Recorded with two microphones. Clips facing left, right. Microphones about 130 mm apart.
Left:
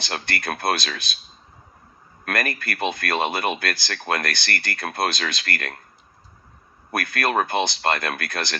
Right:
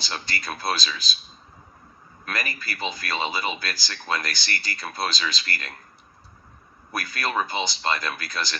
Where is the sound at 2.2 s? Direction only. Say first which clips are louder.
Left 6 dB; 60° left (ahead or behind).